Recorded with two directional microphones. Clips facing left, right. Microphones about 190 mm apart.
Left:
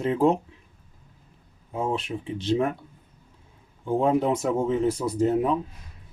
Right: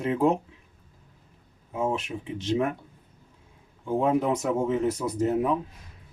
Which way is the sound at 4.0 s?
30° left (ahead or behind).